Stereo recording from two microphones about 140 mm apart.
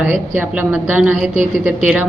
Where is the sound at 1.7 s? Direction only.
10° right (ahead or behind).